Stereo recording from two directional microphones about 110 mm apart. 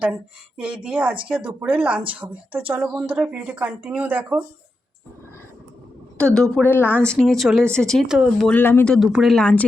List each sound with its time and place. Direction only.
0.0 s speech: 15° right (ahead or behind)
6.1 s a woman's voice: 10° left (ahead or behind)
6.6 s a woman's voice: 20° left (ahead or behind)
7.0 s speech: 10° left (ahead or behind)
8.0 s speech: 5° right (ahead or behind)
8.4 s speech: 15° left (ahead or behind)
8.9 s speech: centre (ahead or behind)